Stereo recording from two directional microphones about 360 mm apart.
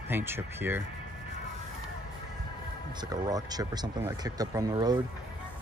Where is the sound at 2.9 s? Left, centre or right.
Centre.